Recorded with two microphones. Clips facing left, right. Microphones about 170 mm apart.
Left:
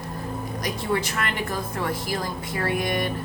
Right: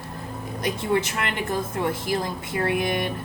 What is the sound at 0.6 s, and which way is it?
A woman's voice, 25° right (ahead or behind).